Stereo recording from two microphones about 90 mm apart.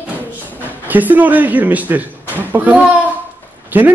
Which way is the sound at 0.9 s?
20° right (ahead or behind).